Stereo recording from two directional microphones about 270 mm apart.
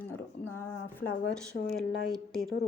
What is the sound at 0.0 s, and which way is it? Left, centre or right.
Speech, centre.